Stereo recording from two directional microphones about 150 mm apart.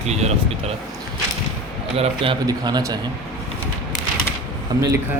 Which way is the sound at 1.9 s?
35° right (ahead or behind).